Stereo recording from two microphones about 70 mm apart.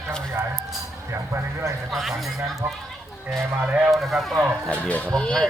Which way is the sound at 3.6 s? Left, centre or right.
Centre.